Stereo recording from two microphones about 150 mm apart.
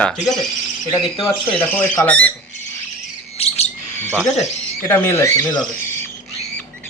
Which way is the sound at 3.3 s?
45° left (ahead or behind).